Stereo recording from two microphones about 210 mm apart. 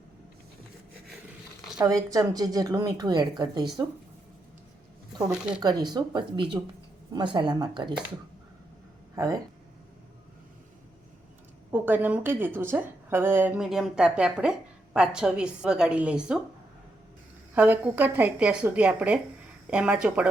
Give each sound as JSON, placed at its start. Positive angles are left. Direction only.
{"t": 1.8, "sound": "a woman's voice", "side_deg": -15}
{"t": 5.3, "sound": "a woman's voice", "side_deg": -5}
{"t": 5.6, "sound": "speech", "side_deg": -20}
{"t": 9.1, "sound": "a woman's voice", "side_deg": -15}
{"t": 11.7, "sound": "a woman's voice", "side_deg": -10}
{"t": 17.5, "sound": "a woman's voice", "side_deg": -10}